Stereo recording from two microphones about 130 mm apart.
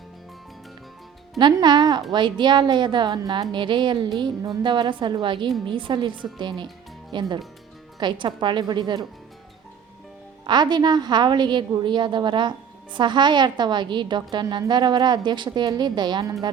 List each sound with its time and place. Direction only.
1.4 s a woman's voice: 35° right (ahead or behind)
10.4 s a woman's voice: 35° right (ahead or behind)